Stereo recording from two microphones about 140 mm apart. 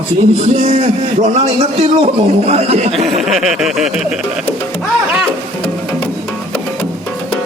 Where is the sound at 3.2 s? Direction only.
Centre (ahead or behind).